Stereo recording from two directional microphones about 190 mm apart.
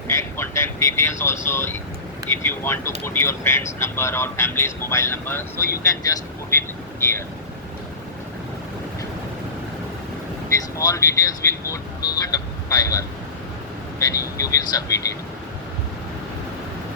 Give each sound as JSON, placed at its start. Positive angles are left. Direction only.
{"t": 0.1, "sound": "speech", "side_deg": 15}
{"t": 10.8, "sound": "speech", "side_deg": 15}